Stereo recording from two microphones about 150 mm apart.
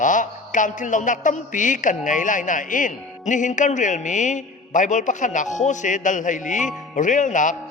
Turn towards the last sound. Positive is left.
turn(degrees=55)  # may be behind; listen again after turning